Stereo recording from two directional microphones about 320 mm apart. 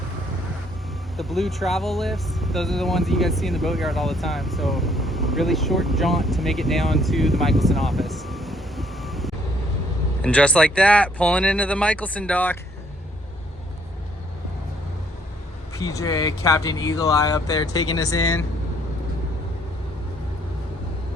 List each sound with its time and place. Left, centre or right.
1.1 s speech: centre
15.8 s speech: centre